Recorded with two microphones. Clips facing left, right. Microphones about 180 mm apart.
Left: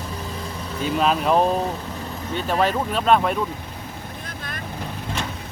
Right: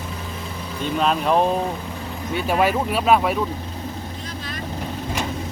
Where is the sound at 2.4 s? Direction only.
10° right (ahead or behind).